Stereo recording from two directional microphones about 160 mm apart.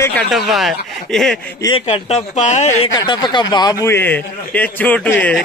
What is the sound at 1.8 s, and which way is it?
Speech, 45° left (ahead or behind).